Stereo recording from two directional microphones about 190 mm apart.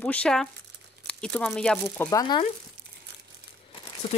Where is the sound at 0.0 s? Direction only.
5° left (ahead or behind).